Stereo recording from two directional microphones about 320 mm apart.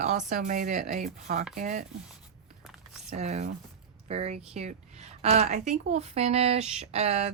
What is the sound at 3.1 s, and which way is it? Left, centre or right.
A woman's voice, right.